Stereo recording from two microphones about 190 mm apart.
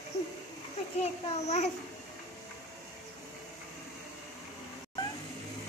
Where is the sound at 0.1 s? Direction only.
35° left (ahead or behind).